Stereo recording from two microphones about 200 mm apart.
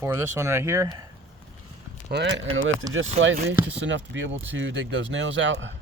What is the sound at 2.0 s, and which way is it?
Speech, 65° right (ahead or behind).